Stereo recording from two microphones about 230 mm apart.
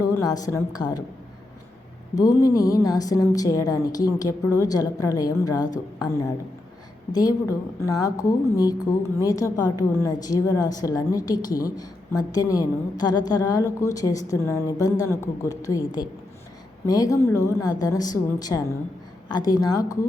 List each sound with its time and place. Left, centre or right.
0.0 s a woman's voice: centre
2.1 s a woman's voice: centre
16.8 s a woman's voice: centre